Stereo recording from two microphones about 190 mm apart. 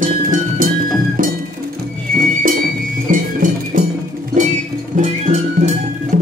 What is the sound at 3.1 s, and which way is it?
Music, 45° right (ahead or behind).